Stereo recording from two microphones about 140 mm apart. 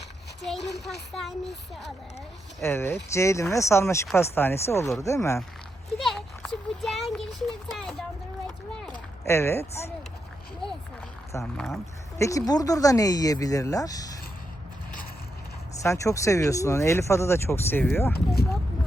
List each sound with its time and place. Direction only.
0.4 s a child's voice: centre (ahead or behind)
2.6 s speech: 15° left (ahead or behind)
6.0 s a sound: centre (ahead or behind)
9.2 s speech: 20° left (ahead or behind)
11.5 s a child's voice: centre (ahead or behind)
12.1 s speech: 25° left (ahead or behind)
15.8 s speech: 20° left (ahead or behind)